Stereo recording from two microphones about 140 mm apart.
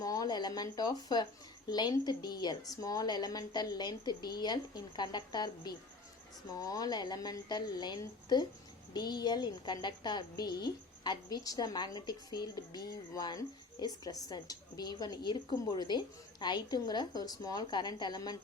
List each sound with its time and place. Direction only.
0.0 s a woman's voice: 25° left (ahead or behind)